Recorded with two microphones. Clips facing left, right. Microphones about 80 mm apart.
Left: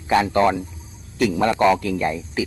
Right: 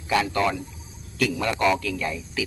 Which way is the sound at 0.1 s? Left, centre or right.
Left.